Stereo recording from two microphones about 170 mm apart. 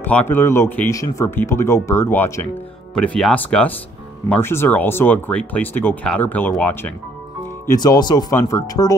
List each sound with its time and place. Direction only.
0.0 s speech: 10° left (ahead or behind)
7.6 s speech: 20° left (ahead or behind)